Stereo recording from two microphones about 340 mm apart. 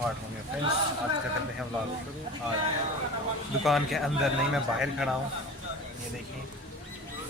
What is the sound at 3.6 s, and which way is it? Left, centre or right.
Speech, centre.